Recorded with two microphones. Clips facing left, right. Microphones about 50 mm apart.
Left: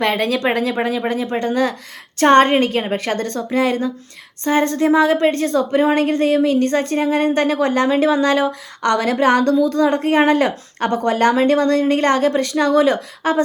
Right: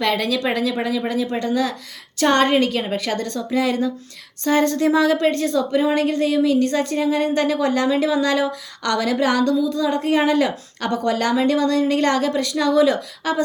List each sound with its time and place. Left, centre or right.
0.0 s a woman's voice: left